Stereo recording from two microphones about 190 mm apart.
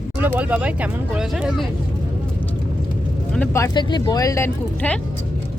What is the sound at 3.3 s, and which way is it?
Speech, 10° left (ahead or behind).